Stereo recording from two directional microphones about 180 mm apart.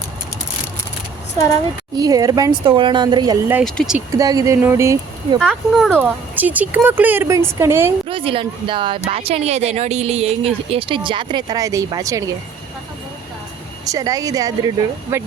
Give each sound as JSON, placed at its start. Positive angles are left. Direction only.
{"t": 2.0, "sound": "speech", "side_deg": -20}
{"t": 3.6, "sound": "speech", "side_deg": 0}
{"t": 4.2, "sound": "speech", "side_deg": -20}
{"t": 5.5, "sound": "speech", "side_deg": 0}
{"t": 8.0, "sound": "speech", "side_deg": -30}
{"t": 13.8, "sound": "speech", "side_deg": -20}